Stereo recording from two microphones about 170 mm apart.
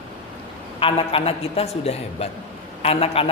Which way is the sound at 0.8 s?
30° left (ahead or behind).